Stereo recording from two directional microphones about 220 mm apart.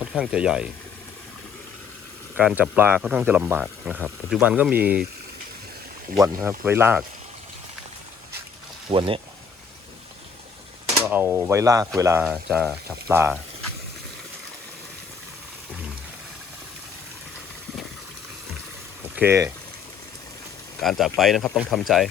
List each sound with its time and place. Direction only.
0.0 s speech: 5° right (ahead or behind)
2.4 s speech: 5° right (ahead or behind)
6.2 s speech: 10° right (ahead or behind)
8.9 s speech: 25° right (ahead or behind)
11.1 s speech: 10° right (ahead or behind)
12.2 s speech: centre (ahead or behind)
19.1 s speech: 10° right (ahead or behind)
20.8 s speech: centre (ahead or behind)